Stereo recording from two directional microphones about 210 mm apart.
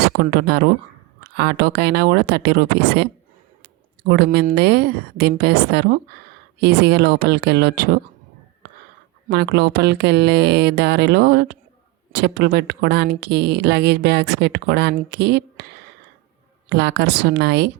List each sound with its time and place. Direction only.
0.0 s speech: 50° right (ahead or behind)
9.3 s speech: 50° right (ahead or behind)
16.6 s speech: 55° right (ahead or behind)